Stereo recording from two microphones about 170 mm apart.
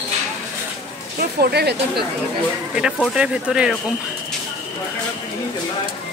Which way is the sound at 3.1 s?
5° right (ahead or behind).